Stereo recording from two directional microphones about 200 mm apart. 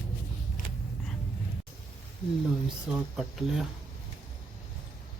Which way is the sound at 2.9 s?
5° right (ahead or behind).